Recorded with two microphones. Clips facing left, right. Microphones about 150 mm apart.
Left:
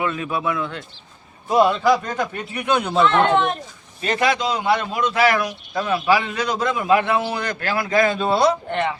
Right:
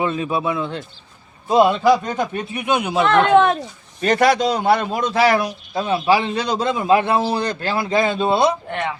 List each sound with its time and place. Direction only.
0.0 s a man's voice: 25° right (ahead or behind)
4.0 s a man's voice: 40° right (ahead or behind); by 8.5 s 20° right (ahead or behind)